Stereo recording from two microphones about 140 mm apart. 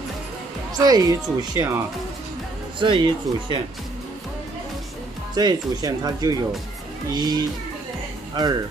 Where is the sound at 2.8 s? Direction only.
35° right (ahead or behind).